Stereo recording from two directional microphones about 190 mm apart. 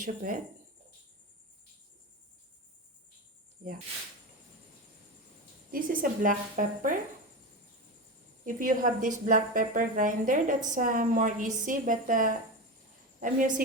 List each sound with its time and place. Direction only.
0.0 s speech: 45° right (ahead or behind)
5.7 s speech: 45° right (ahead or behind)
8.4 s a woman's voice: 45° right (ahead or behind)